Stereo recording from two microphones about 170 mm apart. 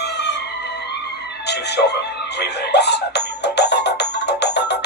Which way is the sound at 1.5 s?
75° left (ahead or behind).